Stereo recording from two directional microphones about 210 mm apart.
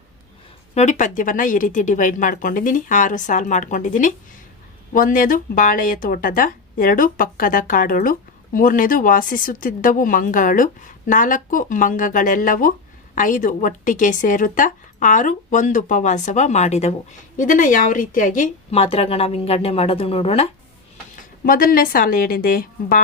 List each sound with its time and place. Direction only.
0.7 s a woman's voice: 35° left (ahead or behind)
21.2 s a woman's voice: 40° left (ahead or behind)